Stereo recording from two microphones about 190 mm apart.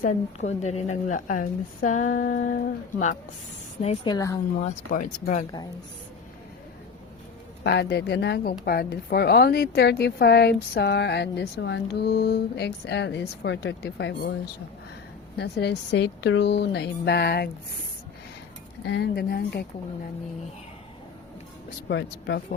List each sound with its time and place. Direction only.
0.0 s a woman's voice: 35° left (ahead or behind)
3.8 s a woman's voice: 20° left (ahead or behind)
4.6 s a woman's voice: 40° left (ahead or behind)
7.6 s speech: 60° left (ahead or behind)
15.4 s speech: 65° left (ahead or behind)
18.9 s speech: 60° left (ahead or behind)
21.8 s speech: 65° left (ahead or behind)